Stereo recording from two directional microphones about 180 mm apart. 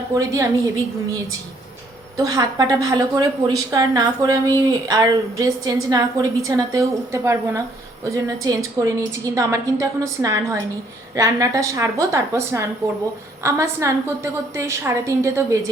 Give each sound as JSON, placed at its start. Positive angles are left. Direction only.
{"t": 0.1, "sound": "a woman's voice", "side_deg": -20}
{"t": 2.1, "sound": "a woman's voice", "side_deg": -20}